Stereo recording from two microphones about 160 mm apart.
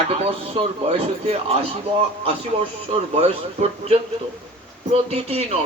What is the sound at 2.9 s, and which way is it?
A man's voice, 40° right (ahead or behind).